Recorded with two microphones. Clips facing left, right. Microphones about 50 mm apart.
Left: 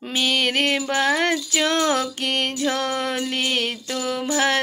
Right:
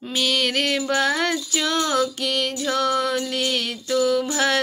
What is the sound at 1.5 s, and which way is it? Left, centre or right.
Music, left.